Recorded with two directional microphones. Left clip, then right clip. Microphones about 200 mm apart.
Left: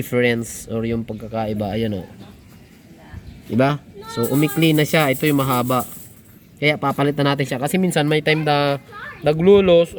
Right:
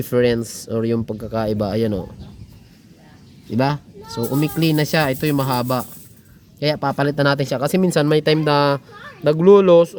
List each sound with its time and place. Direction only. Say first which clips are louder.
0.0 s speech: right 1 dB; 10° right (ahead or behind)
4.2 s speech: left 2 dB; 10° right (ahead or behind)